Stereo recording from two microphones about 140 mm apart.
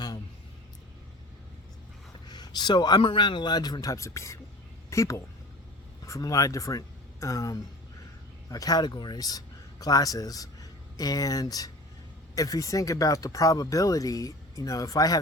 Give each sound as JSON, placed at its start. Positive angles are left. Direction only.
{"t": 2.2, "sound": "a woman's voice", "side_deg": 30}